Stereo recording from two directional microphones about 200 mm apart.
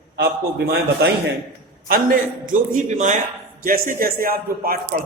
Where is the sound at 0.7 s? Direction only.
55° right (ahead or behind).